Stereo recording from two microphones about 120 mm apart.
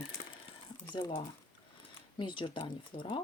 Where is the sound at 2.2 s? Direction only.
40° left (ahead or behind).